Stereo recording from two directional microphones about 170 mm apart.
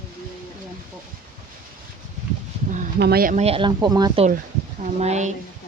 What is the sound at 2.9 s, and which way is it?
Speech, 65° right (ahead or behind).